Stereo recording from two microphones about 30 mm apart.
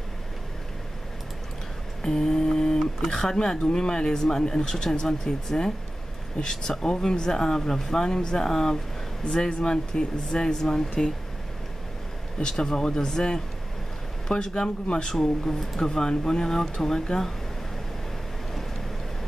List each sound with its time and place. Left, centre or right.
2.0 s mantra: left
3.1 s speech: centre
8.1 s speech: left
12.4 s speech: left
17.1 s speech: left